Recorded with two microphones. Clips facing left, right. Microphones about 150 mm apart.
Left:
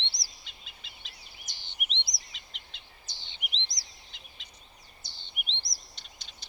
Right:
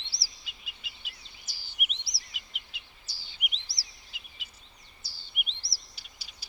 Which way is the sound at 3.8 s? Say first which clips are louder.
Even; 30° right (ahead or behind).